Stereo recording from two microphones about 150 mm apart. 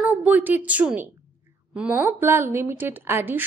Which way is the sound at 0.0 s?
10° right (ahead or behind).